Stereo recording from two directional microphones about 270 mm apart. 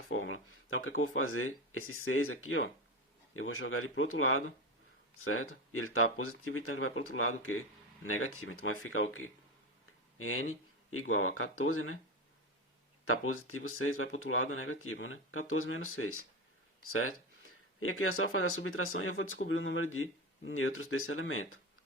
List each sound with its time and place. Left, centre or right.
0.1 s speech: left
13.1 s speech: left